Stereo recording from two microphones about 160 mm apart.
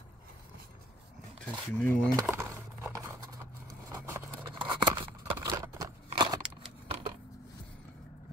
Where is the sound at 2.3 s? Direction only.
20° right (ahead or behind).